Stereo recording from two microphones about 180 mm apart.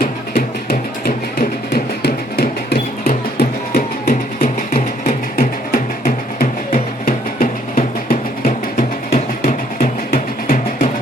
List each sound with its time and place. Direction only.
0.0 s music: 55° left (ahead or behind)